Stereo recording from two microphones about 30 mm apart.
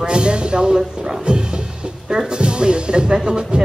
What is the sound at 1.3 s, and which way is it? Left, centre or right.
Music, right.